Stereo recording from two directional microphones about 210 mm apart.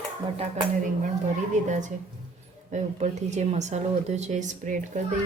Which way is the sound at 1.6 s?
35° right (ahead or behind).